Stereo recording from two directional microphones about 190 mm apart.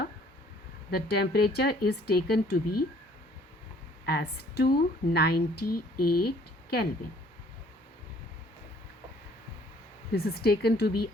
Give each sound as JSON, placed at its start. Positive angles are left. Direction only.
{"t": 0.9, "sound": "a woman's voice", "side_deg": 55}
{"t": 4.0, "sound": "a woman's voice", "side_deg": 60}
{"t": 10.1, "sound": "a woman's voice", "side_deg": 55}